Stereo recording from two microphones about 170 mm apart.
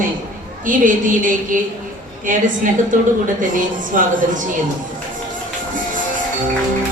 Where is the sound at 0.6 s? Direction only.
50° right (ahead or behind).